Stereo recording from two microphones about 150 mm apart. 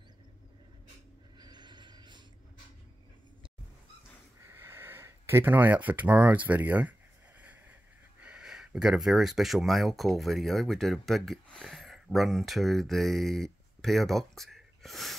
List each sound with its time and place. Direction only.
1.4 s snort: 30° right (ahead or behind)
4.5 s a sound: 15° right (ahead or behind)
8.2 s speech: 5° right (ahead or behind)